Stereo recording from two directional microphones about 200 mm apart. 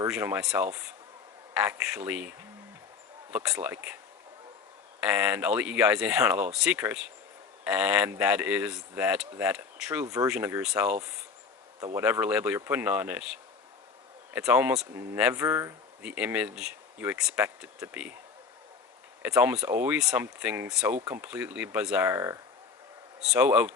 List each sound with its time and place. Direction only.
0.1 s speech: 5° right (ahead or behind)
3.3 s speech: 5° right (ahead or behind)
4.9 s speech: 5° right (ahead or behind)
11.9 s speech: 10° right (ahead or behind)
19.2 s speech: 10° right (ahead or behind)